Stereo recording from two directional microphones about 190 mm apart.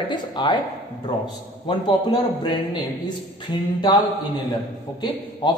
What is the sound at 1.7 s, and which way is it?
A woman's voice, 25° left (ahead or behind).